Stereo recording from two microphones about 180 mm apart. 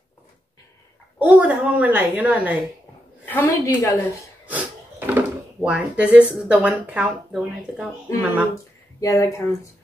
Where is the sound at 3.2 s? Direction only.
10° left (ahead or behind).